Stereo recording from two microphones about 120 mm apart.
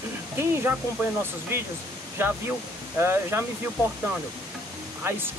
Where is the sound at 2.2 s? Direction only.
20° right (ahead or behind).